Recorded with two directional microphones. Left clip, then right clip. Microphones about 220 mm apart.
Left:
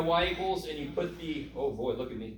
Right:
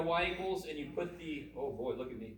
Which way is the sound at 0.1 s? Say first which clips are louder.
Left 7 dB; 50° right (ahead or behind).